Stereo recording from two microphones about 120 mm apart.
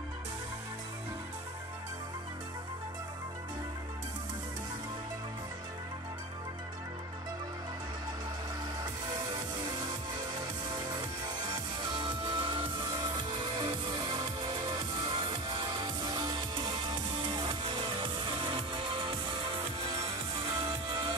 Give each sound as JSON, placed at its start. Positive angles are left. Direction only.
{"t": 10.4, "sound": "music", "side_deg": -35}